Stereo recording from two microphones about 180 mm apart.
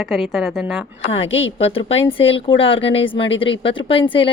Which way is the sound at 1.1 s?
30° left (ahead or behind).